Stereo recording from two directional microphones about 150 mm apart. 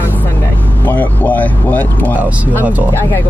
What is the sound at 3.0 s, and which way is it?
Speech, 15° left (ahead or behind).